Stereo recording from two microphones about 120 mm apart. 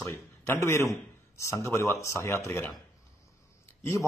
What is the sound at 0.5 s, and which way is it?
A man's voice, 25° left (ahead or behind).